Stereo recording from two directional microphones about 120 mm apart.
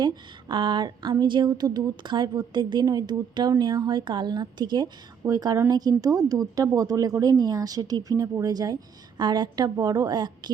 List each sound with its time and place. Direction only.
0.0 s a woman's voice: 35° right (ahead or behind)